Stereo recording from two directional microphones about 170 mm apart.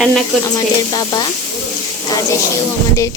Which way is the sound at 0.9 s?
25° left (ahead or behind).